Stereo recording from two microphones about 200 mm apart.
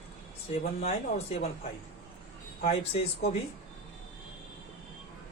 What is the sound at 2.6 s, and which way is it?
Speech, 30° left (ahead or behind).